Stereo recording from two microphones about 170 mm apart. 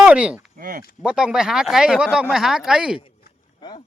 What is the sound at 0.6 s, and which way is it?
Speech, 55° right (ahead or behind).